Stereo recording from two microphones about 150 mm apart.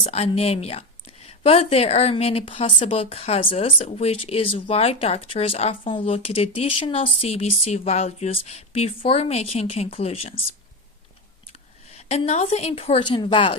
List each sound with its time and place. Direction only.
0.0 s a woman's voice: 40° left (ahead or behind)
11.9 s speech: 45° left (ahead or behind)